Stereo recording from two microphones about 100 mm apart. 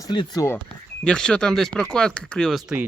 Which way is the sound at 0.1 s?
45° left (ahead or behind).